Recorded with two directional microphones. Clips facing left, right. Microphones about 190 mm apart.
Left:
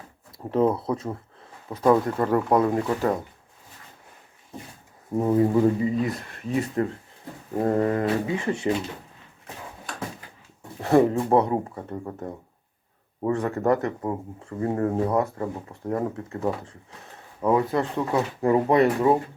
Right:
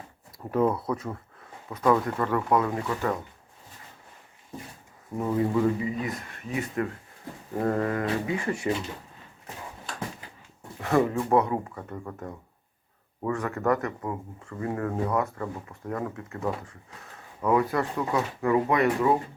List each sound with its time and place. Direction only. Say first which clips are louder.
0.5 s speech: left 3 dB; 25° left (ahead or behind)
5.1 s speech: left 5 dB; 30° left (ahead or behind)
10.8 s speech: left 5 dB; 30° left (ahead or behind)